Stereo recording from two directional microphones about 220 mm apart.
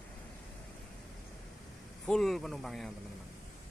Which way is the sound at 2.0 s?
Centre (ahead or behind).